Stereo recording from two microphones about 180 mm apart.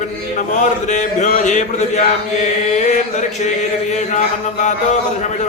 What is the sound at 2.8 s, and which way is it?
Mantra, 40° left (ahead or behind).